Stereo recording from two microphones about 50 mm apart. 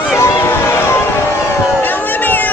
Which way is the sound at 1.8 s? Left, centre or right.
Left.